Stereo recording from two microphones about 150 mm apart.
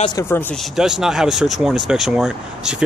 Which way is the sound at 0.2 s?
15° left (ahead or behind).